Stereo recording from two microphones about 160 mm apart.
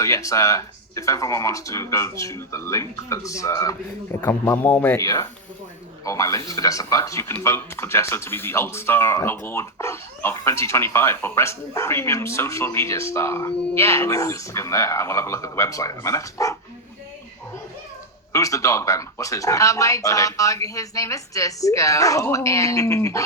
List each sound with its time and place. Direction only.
0.0 s speech: 20° left (ahead or behind)
18.3 s speech: 20° left (ahead or behind)